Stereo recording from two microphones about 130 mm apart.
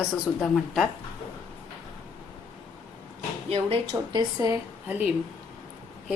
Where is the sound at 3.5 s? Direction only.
50° right (ahead or behind).